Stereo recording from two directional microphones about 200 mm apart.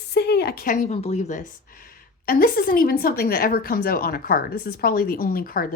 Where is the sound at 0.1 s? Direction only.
55° left (ahead or behind); by 1.4 s 35° left (ahead or behind).